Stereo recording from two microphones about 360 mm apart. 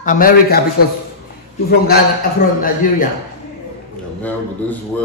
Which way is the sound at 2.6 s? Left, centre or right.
Left.